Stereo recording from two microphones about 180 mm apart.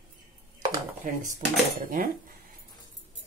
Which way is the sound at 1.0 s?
50° right (ahead or behind).